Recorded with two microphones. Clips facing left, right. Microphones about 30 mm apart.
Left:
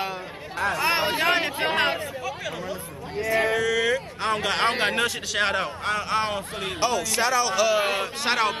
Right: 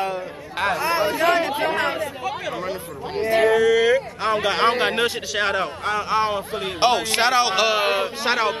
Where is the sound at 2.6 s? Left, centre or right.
Right.